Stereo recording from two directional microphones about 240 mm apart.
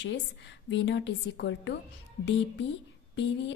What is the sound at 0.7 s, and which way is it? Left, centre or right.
Speech, left.